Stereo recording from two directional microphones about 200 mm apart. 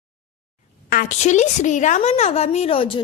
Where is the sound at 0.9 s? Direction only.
40° left (ahead or behind).